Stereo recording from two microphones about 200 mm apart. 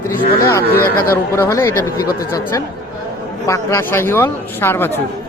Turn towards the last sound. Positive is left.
turn(degrees=10)  # may be behind; listen again after turning